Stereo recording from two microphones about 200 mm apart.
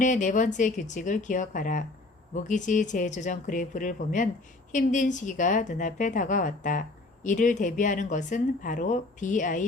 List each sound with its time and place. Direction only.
0.0 s speech: 40° left (ahead or behind)